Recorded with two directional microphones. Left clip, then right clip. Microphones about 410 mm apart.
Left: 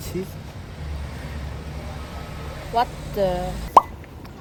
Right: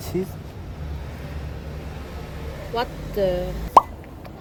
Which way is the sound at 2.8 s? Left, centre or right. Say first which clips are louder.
Left 3 dB; centre.